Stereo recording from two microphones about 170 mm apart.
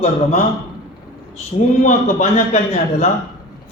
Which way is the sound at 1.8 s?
45° left (ahead or behind).